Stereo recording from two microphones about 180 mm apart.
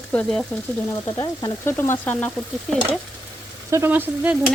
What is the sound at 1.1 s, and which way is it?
Sizzle, 20° left (ahead or behind).